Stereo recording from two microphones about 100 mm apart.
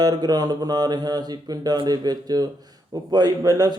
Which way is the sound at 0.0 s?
40° right (ahead or behind).